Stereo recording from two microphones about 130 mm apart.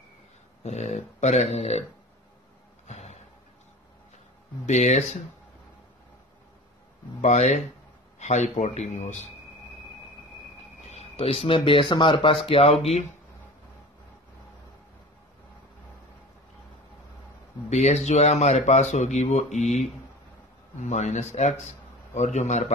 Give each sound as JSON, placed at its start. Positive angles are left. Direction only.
{"t": 0.7, "sound": "speech", "side_deg": 65}
{"t": 2.9, "sound": "music", "side_deg": 60}
{"t": 4.6, "sound": "speech", "side_deg": 65}
{"t": 7.2, "sound": "speech", "side_deg": 60}
{"t": 10.9, "sound": "speech", "side_deg": 55}
{"t": 17.6, "sound": "speech", "side_deg": 60}